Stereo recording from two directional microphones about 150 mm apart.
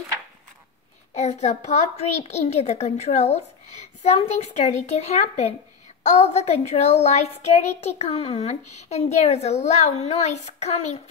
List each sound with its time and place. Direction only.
1.1 s speech: 50° left (ahead or behind)